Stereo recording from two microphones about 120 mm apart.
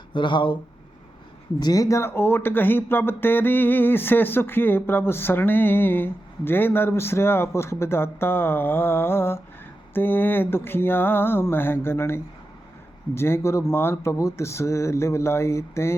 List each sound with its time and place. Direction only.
0.1 s speech: 40° left (ahead or behind)
1.5 s speech: 30° left (ahead or behind)
9.9 s a sound: 15° left (ahead or behind)
13.1 s speech: 20° left (ahead or behind)